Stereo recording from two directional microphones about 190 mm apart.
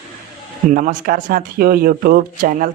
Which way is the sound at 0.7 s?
45° right (ahead or behind).